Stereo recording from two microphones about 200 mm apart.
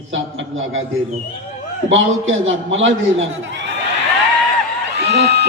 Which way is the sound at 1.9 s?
75° right (ahead or behind).